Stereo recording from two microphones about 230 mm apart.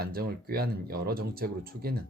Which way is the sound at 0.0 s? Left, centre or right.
Right.